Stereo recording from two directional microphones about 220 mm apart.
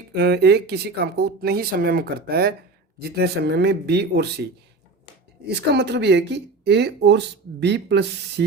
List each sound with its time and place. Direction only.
0.1 s speech: 50° right (ahead or behind)
5.5 s speech: 50° right (ahead or behind)